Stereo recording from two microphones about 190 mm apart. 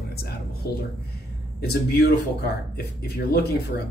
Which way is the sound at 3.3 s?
60° left (ahead or behind).